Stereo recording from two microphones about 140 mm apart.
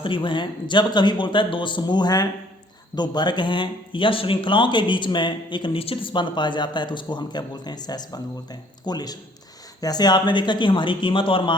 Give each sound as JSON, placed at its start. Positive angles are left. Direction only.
{"t": 0.0, "sound": "speech", "side_deg": 35}